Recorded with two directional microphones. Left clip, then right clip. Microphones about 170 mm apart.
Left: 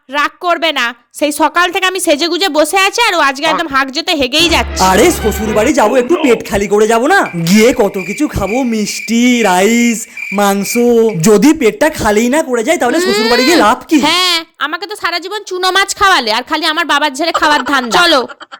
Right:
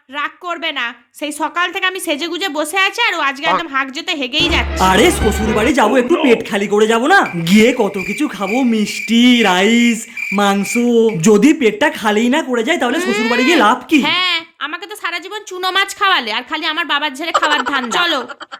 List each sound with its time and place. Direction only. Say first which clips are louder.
0.2 s a woman's voice: left 9 dB; 50° left (ahead or behind)
4.8 s a woman's voice: left 2 dB; 25° left (ahead or behind)
5.2 s speech: left 1 dB; centre (ahead or behind)
5.5 s a woman's voice: left 4 dB; 20° left (ahead or behind)
14.0 s a woman's voice: left 4 dB; 45° left (ahead or behind)